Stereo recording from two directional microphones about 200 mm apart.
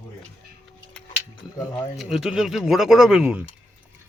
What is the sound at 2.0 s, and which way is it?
Speech, centre (ahead or behind).